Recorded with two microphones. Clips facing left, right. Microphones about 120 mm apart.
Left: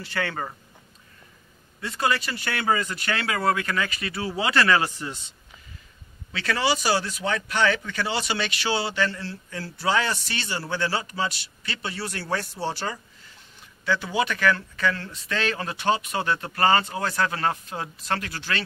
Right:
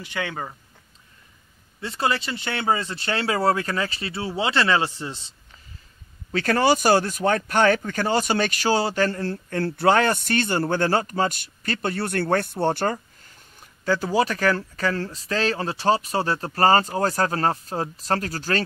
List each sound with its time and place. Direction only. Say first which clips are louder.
0.0 s speech: even; 15° right (ahead or behind)
1.8 s speech: right 1 dB; 30° right (ahead or behind)
6.3 s speech: right 5 dB; 45° right (ahead or behind)